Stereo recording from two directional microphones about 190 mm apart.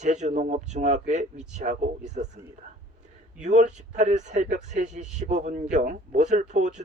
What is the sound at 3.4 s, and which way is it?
A man's voice, 40° right (ahead or behind).